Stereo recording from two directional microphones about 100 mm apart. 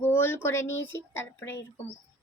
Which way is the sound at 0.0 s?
20° left (ahead or behind).